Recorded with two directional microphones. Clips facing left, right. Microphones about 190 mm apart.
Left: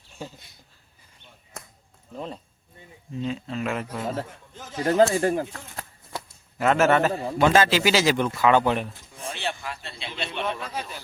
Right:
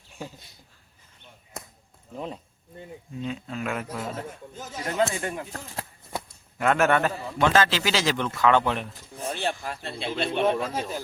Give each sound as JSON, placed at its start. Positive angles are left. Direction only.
{"t": 2.1, "sound": "speech", "side_deg": -10}
{"t": 4.9, "sound": "speech", "side_deg": 35}
{"t": 5.5, "sound": "speech", "side_deg": -40}
{"t": 6.6, "sound": "speech", "side_deg": 5}
{"t": 9.2, "sound": "a man's voice", "side_deg": -45}